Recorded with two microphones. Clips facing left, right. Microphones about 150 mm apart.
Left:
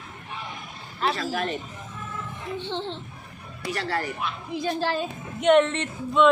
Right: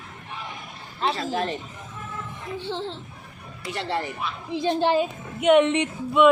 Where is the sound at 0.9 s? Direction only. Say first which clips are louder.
Right 1 dB; 25° right (ahead or behind).